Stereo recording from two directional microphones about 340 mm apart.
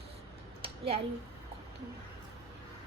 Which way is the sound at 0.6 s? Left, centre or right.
Centre.